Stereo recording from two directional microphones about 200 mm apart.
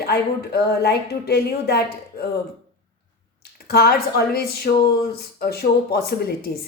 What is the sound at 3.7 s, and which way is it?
A woman's voice, 50° left (ahead or behind).